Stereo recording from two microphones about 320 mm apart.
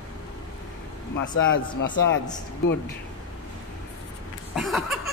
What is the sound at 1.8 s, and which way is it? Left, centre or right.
Speech, left.